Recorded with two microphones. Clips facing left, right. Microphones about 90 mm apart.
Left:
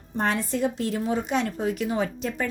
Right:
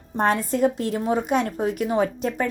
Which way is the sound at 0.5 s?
40° right (ahead or behind).